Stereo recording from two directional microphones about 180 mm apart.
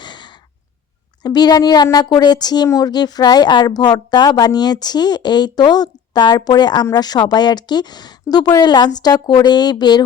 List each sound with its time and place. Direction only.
0.0 s sigh: 25° left (ahead or behind)
1.2 s speech: 20° left (ahead or behind)